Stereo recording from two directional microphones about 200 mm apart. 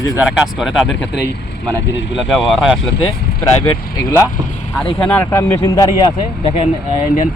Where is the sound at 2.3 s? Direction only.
Centre (ahead or behind).